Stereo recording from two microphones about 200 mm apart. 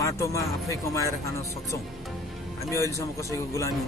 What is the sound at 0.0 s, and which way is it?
Speech, 15° left (ahead or behind).